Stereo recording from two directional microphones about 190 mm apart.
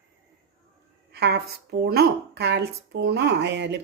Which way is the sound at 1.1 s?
60° right (ahead or behind).